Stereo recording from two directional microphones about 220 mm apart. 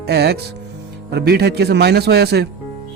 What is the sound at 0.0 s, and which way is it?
Speech, 45° right (ahead or behind).